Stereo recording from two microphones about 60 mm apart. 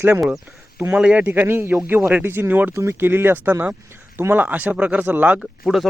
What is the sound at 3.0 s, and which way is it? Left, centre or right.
A man's voice, right.